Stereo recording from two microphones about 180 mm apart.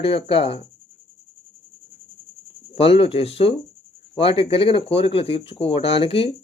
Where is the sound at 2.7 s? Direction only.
30° left (ahead or behind).